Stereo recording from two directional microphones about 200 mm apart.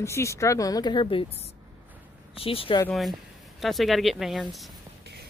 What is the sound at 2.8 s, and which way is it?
Speech, centre (ahead or behind).